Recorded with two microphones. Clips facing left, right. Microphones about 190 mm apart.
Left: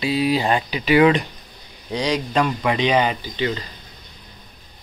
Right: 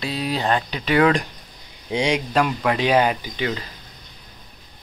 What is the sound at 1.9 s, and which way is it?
Speech, 25° right (ahead or behind).